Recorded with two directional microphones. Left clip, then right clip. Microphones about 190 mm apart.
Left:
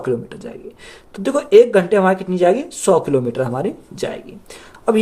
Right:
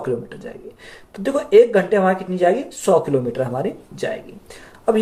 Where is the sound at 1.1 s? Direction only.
45° left (ahead or behind).